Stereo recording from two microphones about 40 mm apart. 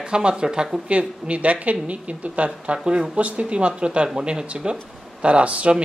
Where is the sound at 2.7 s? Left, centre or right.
Right.